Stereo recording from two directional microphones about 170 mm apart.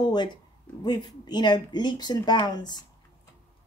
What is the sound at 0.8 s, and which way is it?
Speech, 25° left (ahead or behind).